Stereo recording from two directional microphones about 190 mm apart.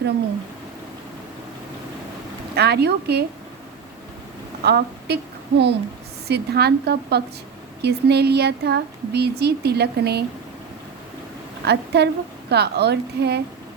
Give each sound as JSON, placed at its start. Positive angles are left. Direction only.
{"t": 2.6, "sound": "speech", "side_deg": -60}
{"t": 4.6, "sound": "a woman's voice", "side_deg": -60}
{"t": 11.6, "sound": "a woman's voice", "side_deg": -60}